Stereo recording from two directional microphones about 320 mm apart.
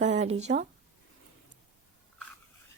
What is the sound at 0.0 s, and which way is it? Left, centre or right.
Speech, right.